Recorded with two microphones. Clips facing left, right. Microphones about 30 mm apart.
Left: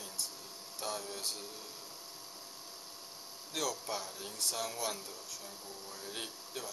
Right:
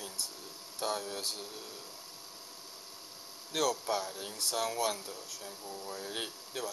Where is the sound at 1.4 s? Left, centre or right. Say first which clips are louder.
Right 3 dB; centre.